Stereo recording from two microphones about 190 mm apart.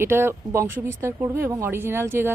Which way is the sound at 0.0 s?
10° right (ahead or behind).